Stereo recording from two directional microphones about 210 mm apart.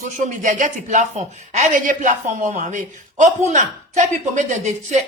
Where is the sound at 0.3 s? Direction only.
40° right (ahead or behind).